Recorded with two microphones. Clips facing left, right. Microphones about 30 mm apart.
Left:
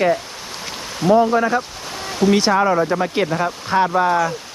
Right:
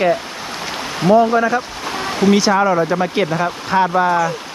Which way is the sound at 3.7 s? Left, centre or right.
Right.